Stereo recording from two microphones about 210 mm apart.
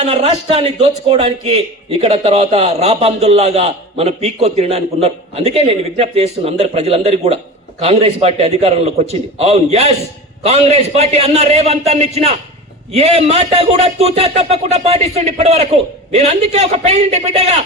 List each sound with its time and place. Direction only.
0.0 s speech: 30° right (ahead or behind)